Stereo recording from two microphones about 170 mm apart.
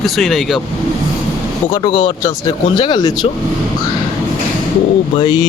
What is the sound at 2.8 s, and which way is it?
Speech, 25° left (ahead or behind).